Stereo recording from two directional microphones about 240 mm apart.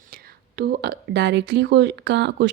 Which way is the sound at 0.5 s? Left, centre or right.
Right.